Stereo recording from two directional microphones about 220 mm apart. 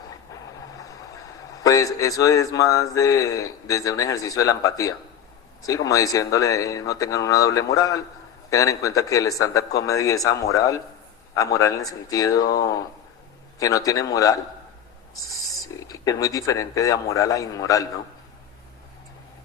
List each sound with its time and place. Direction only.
0.7 s a man's voice: 15° left (ahead or behind)
15.6 s speech: 15° left (ahead or behind)